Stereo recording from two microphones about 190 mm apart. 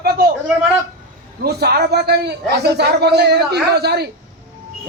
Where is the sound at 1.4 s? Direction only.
55° right (ahead or behind).